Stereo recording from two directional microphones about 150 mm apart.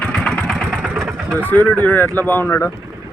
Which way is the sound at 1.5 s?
10° left (ahead or behind).